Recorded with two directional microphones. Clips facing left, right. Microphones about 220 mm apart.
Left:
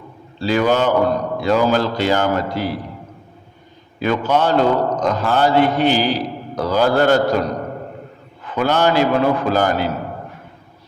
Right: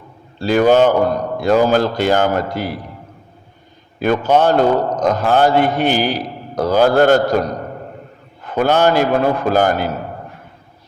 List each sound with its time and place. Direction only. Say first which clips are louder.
0.3 s a man's voice: right 5 dB; 50° right (ahead or behind)
4.0 s a man's voice: right 3 dB; 50° right (ahead or behind)